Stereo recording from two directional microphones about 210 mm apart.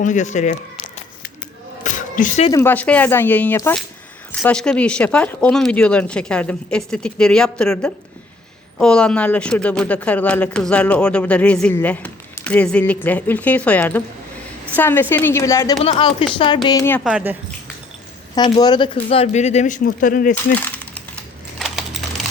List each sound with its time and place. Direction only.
0.0 s speech: 35° left (ahead or behind)
1.8 s a sound: 35° left (ahead or behind)
2.5 s speech: 10° left (ahead or behind)
15.8 s speech: 25° left (ahead or behind)
16.6 s speech: 15° left (ahead or behind)
17.0 s speech: 5° right (ahead or behind)
18.3 s speech: 20° left (ahead or behind); by 20.3 s 40° left (ahead or behind)
20.6 s a sound: 5° left (ahead or behind)